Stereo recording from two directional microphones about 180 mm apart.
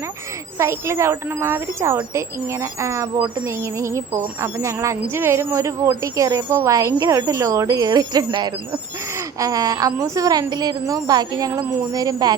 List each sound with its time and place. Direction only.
0.6 s a woman's voice: 15° right (ahead or behind)